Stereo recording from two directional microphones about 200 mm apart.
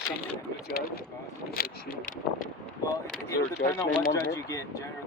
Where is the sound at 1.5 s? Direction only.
50° left (ahead or behind).